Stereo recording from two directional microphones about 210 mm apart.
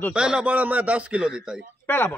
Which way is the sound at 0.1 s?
5° right (ahead or behind).